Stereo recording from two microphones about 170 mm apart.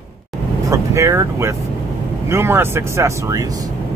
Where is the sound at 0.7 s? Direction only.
15° right (ahead or behind).